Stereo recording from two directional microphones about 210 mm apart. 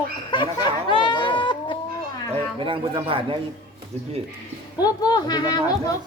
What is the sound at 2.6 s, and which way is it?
Speech, 25° right (ahead or behind).